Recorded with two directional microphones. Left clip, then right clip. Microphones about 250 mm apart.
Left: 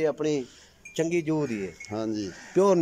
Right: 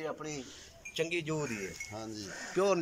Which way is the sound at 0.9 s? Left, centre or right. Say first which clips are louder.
Left 8 dB; left.